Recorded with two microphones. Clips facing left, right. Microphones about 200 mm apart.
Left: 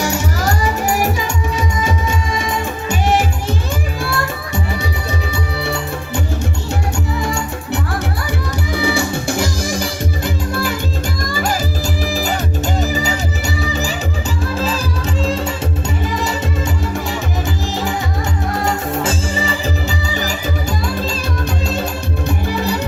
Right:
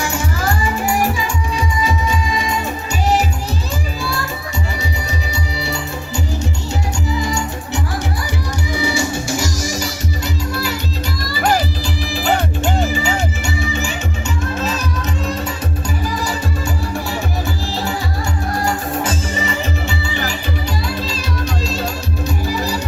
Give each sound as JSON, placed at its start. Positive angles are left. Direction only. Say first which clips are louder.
{"t": 5.5, "sound": "music", "louder": "left 2 dB", "side_deg": 55}
{"t": 18.6, "sound": "music", "louder": "left 2 dB", "side_deg": 30}
{"t": 20.8, "sound": "music", "louder": "left 2 dB", "side_deg": 50}
{"t": 22.4, "sound": "music", "louder": "left 1 dB", "side_deg": 55}